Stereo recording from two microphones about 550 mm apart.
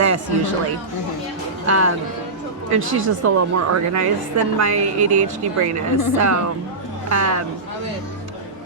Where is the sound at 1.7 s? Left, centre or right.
Right.